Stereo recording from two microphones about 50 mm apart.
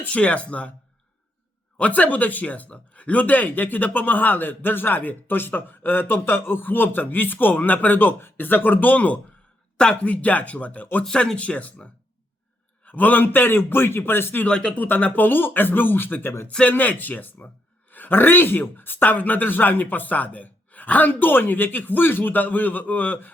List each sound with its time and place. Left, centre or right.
0.1 s speech: left
1.8 s speech: left
9.7 s speech: centre
10.1 s speech: left
11.1 s a man's voice: centre; by 14.4 s left
14.4 s speech: centre
14.8 s a man's voice: left